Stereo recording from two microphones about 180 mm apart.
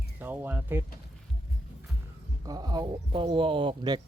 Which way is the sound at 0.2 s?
10° right (ahead or behind).